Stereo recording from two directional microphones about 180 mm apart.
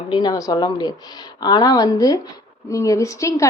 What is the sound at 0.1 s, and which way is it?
A woman's voice, 25° left (ahead or behind).